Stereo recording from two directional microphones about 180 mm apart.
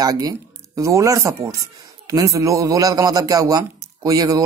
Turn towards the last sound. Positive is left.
turn(degrees=-20)  # may be behind; listen again after turning